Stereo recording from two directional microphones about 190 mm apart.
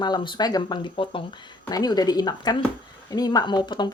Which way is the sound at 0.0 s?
25° left (ahead or behind).